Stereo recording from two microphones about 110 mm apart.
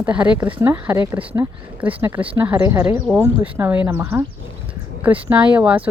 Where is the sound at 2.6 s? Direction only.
25° right (ahead or behind).